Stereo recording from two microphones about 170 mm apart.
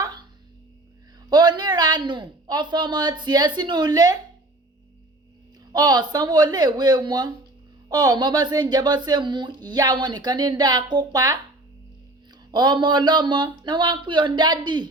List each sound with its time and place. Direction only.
0.0 s a sound: 25° right (ahead or behind)
1.3 s speech: 25° right (ahead or behind)
5.7 s speech: 25° right (ahead or behind)